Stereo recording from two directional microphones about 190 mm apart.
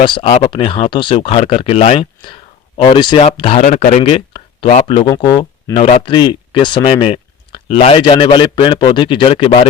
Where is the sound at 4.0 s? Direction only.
30° left (ahead or behind).